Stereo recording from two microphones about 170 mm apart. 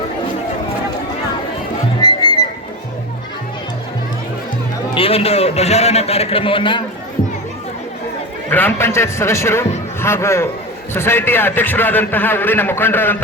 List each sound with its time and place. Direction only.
2.0 s music: 25° left (ahead or behind)
4.9 s a man's voice: 35° left (ahead or behind)
8.4 s a man's voice: 10° left (ahead or behind)